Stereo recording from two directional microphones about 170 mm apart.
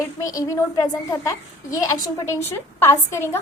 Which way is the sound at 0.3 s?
20° left (ahead or behind).